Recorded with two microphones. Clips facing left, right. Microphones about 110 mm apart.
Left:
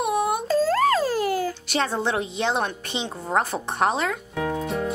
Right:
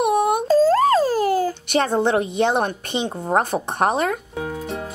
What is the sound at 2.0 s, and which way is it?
A woman's voice, 55° right (ahead or behind).